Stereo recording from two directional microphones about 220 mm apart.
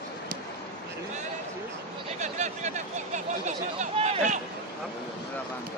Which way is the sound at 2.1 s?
30° right (ahead or behind).